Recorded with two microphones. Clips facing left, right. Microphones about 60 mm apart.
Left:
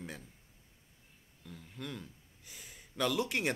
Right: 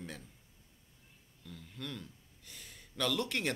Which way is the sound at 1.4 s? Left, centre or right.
Centre.